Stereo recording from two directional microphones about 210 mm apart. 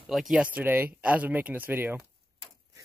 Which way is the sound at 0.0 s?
Centre (ahead or behind).